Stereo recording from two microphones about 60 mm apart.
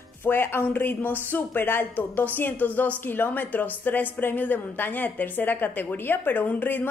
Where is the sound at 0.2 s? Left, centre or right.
Left.